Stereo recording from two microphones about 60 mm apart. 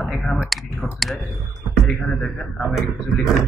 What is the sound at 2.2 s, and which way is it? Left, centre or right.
Speech, centre.